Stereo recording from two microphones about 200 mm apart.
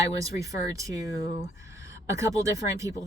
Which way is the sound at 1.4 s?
15° right (ahead or behind).